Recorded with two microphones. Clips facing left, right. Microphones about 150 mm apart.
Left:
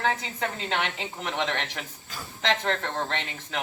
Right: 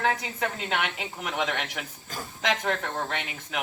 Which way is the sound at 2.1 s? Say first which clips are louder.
Right 4 dB; 45° right (ahead or behind).